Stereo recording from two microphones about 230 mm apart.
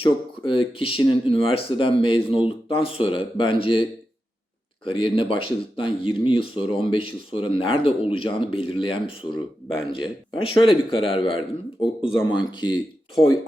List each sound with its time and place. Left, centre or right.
0.0 s speech: left
4.9 s speech: left